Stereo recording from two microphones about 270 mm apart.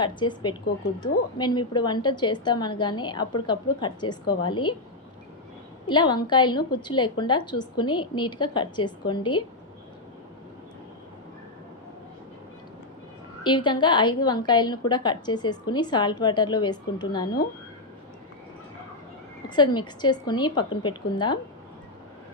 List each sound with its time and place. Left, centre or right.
0.2 s a woman's voice: centre
5.8 s a woman's voice: centre
13.4 s a woman's voice: centre
19.5 s a woman's voice: centre